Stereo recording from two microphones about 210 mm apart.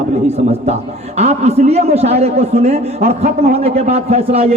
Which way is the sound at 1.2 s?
30° right (ahead or behind).